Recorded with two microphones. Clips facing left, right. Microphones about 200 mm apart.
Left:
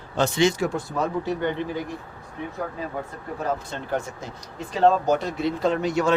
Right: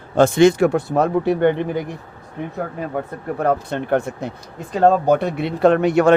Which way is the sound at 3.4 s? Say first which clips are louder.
Right 8 dB; 60° right (ahead or behind).